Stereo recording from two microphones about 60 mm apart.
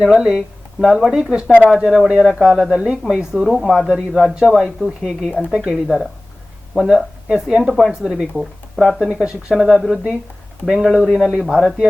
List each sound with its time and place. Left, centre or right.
0.0 s speech: centre
3.6 s speech: centre
5.4 s speech: centre
6.7 s speech: centre